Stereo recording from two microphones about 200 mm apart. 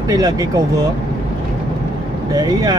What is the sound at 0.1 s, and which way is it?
Speech, 20° right (ahead or behind).